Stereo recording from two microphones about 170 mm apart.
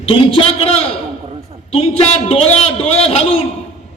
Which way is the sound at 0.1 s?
35° left (ahead or behind).